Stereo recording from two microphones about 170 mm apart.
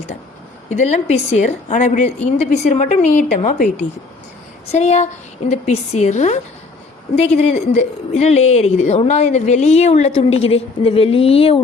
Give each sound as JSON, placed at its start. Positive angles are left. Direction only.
{"t": 0.7, "sound": "a woman's voice", "side_deg": 45}
{"t": 4.7, "sound": "a woman's voice", "side_deg": 40}